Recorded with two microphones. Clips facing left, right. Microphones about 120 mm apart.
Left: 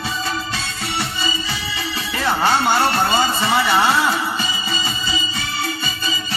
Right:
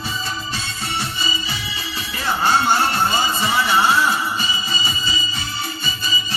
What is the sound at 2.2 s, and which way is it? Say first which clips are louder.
Music: left 1 dB; 70° left (ahead or behind).